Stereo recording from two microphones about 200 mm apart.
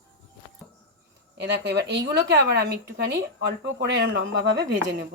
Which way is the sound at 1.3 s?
55° right (ahead or behind).